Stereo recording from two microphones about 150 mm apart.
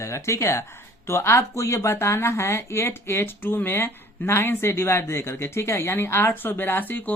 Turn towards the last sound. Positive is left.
turn(degrees=10)  # may be behind; listen again after turning